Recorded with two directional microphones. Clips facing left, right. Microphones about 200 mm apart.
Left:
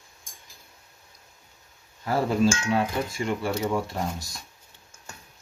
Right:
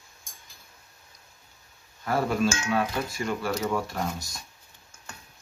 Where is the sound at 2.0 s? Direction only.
25° left (ahead or behind).